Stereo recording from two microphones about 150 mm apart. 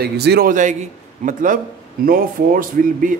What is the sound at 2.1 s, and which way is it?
Speech, 70° right (ahead or behind).